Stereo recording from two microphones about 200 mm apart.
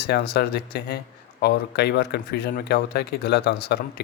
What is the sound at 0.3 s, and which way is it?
Speech, 50° left (ahead or behind).